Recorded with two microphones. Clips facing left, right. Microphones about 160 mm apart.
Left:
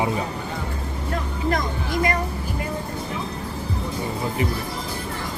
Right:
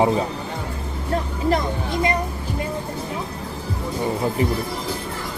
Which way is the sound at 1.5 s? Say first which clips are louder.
Right 3 dB; 25° right (ahead or behind).